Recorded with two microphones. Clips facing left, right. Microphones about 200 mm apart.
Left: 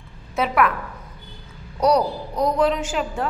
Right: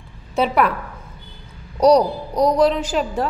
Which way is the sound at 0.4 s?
30° right (ahead or behind).